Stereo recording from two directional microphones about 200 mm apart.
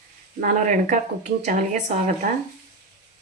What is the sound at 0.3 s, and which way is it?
Speech, 40° right (ahead or behind).